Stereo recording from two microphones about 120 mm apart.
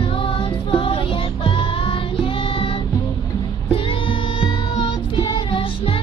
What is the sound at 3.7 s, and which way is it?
Child singing, 50° left (ahead or behind).